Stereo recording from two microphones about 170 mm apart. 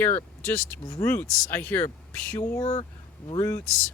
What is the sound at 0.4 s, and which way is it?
Speech, 15° left (ahead or behind).